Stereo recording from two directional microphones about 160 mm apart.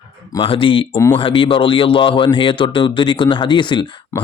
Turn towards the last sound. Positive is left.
turn(degrees=20)  # may be behind; listen again after turning